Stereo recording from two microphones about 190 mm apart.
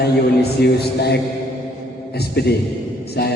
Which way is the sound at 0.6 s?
60° left (ahead or behind).